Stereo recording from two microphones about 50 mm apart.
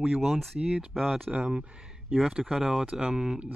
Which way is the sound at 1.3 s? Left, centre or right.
Centre.